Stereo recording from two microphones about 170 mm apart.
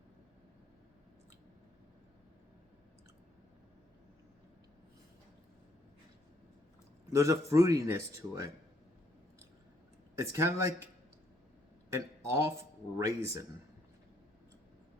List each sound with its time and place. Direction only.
7.1 s a man's voice: 20° right (ahead or behind)
10.2 s speech: 15° right (ahead or behind)
11.9 s speech: 15° right (ahead or behind)